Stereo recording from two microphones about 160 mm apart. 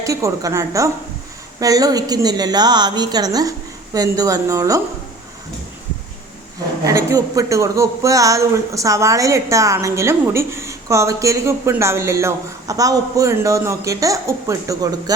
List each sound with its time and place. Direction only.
0.0 s speech: 20° right (ahead or behind)
6.8 s speech: 20° right (ahead or behind)